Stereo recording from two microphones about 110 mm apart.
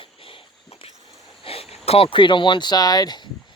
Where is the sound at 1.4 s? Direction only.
60° left (ahead or behind).